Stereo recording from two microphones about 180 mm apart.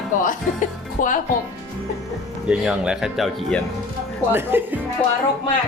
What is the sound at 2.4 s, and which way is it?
Music, 5° right (ahead or behind).